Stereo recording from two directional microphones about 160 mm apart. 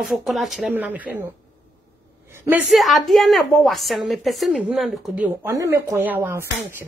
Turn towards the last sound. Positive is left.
turn(degrees=-10)  # may be behind; listen again after turning